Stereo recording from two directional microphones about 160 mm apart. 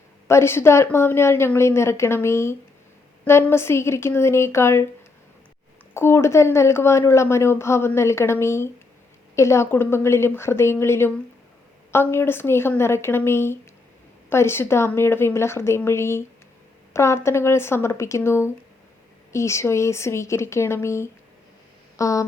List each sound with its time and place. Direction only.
0.3 s a woman's voice: 15° left (ahead or behind)
5.9 s a woman's voice: 15° left (ahead or behind)
21.9 s a sound: 20° left (ahead or behind)